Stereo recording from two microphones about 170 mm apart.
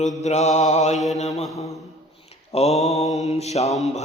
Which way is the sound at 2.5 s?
40° left (ahead or behind).